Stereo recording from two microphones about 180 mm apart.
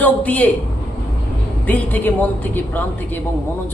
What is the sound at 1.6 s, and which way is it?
Speech, 10° left (ahead or behind).